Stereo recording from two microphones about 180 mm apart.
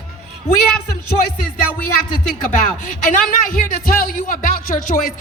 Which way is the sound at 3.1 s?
50° left (ahead or behind).